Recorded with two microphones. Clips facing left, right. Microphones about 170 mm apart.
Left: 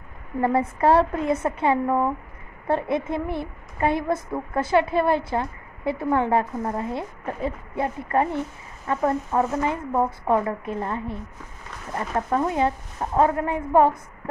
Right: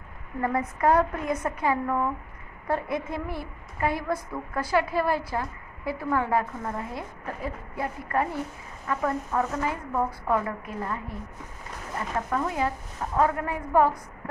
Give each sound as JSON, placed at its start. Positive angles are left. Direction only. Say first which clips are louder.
{"t": 0.4, "sound": "a woman's voice", "louder": "left 5 dB", "side_deg": 30}
{"t": 12.3, "sound": "a woman's voice", "louder": "left 6 dB", "side_deg": 30}